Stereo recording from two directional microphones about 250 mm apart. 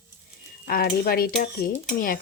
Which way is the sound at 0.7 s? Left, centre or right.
Left.